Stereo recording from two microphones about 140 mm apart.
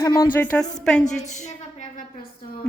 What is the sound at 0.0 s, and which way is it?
Speech, 25° left (ahead or behind).